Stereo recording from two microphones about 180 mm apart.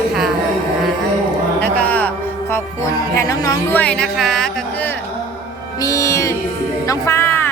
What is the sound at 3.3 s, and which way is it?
Speech, 20° left (ahead or behind).